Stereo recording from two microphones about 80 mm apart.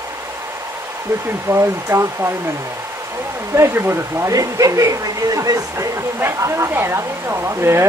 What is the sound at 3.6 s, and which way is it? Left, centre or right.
Speech, right.